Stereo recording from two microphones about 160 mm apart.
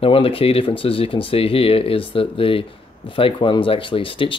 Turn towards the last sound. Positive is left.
turn(degrees=35)  # may be behind; listen again after turning